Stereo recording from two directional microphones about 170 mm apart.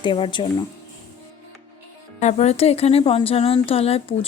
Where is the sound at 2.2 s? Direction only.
40° left (ahead or behind).